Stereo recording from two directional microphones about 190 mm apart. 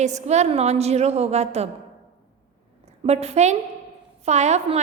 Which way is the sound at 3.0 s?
35° right (ahead or behind).